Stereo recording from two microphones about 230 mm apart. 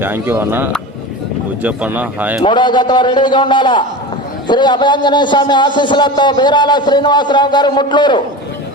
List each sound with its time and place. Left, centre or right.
0.0 s speech: centre
2.4 s a man's voice: centre